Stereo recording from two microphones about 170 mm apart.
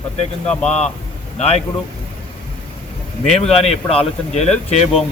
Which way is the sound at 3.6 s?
40° left (ahead or behind).